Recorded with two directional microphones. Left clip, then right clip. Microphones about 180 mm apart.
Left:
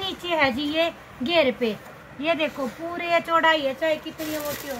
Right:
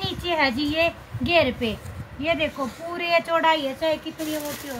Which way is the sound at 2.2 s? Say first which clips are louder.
Even; 15° left (ahead or behind).